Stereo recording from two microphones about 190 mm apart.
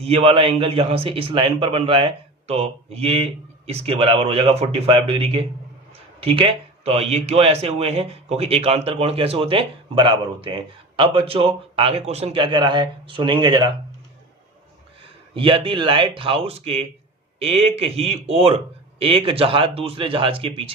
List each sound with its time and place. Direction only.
0.0 s speech: 30° right (ahead or behind)
15.4 s speech: 30° right (ahead or behind)